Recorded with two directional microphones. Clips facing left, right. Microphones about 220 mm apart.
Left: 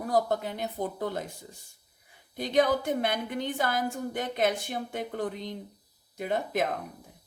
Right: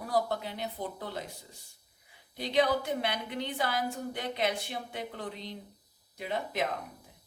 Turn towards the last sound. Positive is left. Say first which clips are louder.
# left 4 dB
turn(degrees=50)  # may be behind; listen again after turning